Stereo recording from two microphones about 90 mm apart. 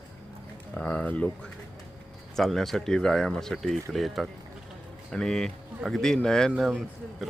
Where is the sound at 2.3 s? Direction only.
5° left (ahead or behind).